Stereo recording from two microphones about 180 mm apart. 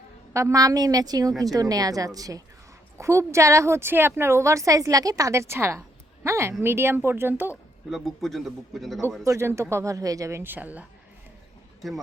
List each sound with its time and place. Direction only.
0.3 s a woman's voice: 15° right (ahead or behind)
7.9 s a man's voice: centre (ahead or behind)
9.2 s a woman's voice: 15° right (ahead or behind)